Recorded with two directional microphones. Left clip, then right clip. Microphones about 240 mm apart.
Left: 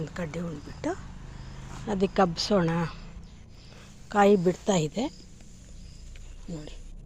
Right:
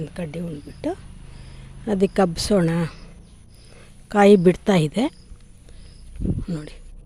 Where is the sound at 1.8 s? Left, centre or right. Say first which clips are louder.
Right 5 dB; right.